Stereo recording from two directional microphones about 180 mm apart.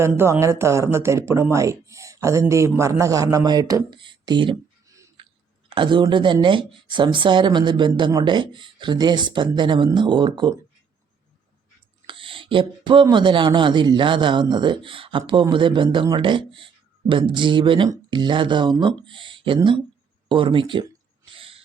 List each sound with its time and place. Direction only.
0.0 s speech: 15° right (ahead or behind)
12.0 s speech: 30° right (ahead or behind)
21.2 s a sound: 30° right (ahead or behind)